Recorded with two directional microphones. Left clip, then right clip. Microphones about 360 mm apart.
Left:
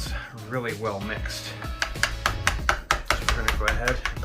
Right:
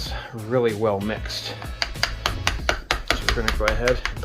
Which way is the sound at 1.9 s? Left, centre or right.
Centre.